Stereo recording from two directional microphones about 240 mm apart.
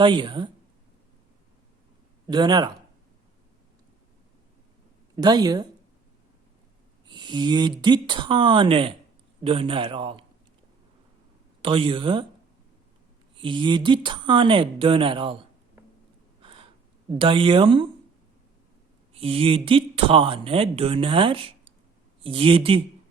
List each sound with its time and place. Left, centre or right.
0.0 s speech: centre
2.2 s speech: centre
5.1 s speech: centre
7.1 s speech: centre
11.6 s speech: right
13.3 s speech: centre
16.4 s gasp: right
17.1 s speech: right
19.1 s speech: right